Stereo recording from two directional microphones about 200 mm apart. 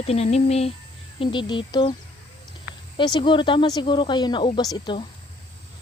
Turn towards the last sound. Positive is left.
turn(degrees=20)  # may be behind; listen again after turning